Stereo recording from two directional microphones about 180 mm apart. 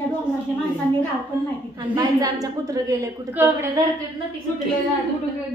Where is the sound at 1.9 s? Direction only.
20° right (ahead or behind).